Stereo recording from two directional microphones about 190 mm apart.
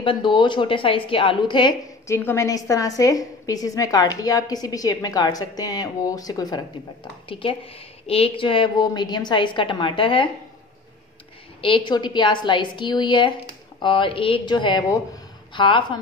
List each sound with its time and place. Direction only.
0.0 s a woman's voice: 25° left (ahead or behind)
11.6 s a woman's voice: 25° left (ahead or behind)